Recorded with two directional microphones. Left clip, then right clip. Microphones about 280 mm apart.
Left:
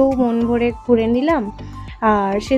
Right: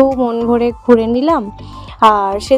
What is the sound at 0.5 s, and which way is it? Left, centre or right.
A woman's voice, right.